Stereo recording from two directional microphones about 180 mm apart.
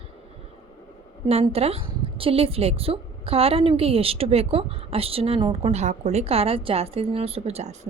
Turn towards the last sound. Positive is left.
turn(degrees=-35)  # may be behind; listen again after turning